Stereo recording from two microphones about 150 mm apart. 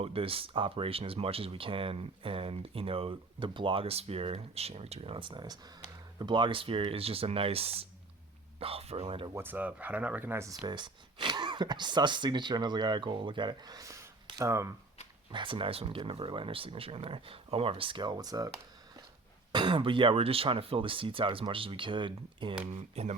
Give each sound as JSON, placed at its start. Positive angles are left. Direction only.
{"t": 0.0, "sound": "speech", "side_deg": -40}
{"t": 9.3, "sound": "speech", "side_deg": -15}
{"t": 10.7, "sound": "speech", "side_deg": -30}
{"t": 15.3, "sound": "speech", "side_deg": -35}
{"t": 19.5, "sound": "speech", "side_deg": -35}
{"t": 22.7, "sound": "speech", "side_deg": -45}